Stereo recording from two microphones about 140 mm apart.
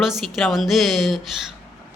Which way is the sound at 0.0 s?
Centre (ahead or behind).